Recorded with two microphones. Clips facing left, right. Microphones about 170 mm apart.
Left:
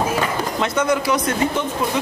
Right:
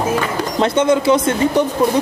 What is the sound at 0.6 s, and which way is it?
Speech, 25° right (ahead or behind).